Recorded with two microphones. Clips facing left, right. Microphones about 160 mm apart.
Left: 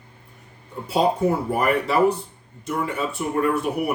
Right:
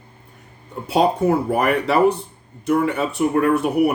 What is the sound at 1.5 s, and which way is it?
Speech, 70° right (ahead or behind).